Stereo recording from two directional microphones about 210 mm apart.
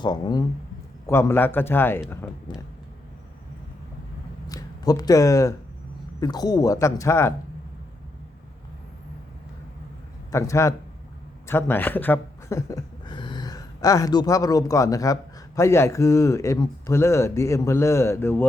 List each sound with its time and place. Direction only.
0.0 s speech: 20° left (ahead or behind)
4.4 s speech: 15° left (ahead or behind)
10.3 s speech: 15° left (ahead or behind)